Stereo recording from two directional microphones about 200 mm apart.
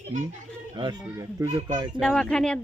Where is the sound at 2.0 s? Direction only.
5° left (ahead or behind).